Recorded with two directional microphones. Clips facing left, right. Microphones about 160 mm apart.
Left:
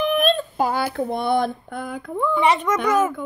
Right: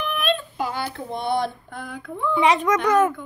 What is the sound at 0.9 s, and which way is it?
Speech, 55° left (ahead or behind).